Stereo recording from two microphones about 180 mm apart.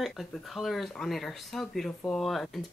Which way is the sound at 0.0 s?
Centre (ahead or behind).